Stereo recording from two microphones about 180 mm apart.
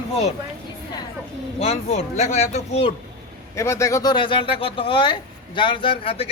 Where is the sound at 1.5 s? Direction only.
35° left (ahead or behind).